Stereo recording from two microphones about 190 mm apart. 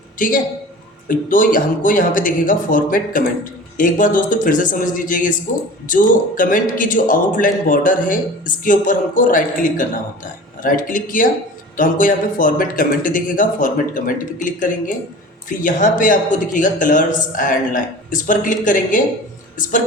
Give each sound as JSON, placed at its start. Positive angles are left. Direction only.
{"t": 0.2, "sound": "a man's voice", "side_deg": 45}